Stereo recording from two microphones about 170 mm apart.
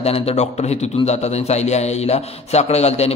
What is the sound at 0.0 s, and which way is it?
A man's voice, 35° left (ahead or behind).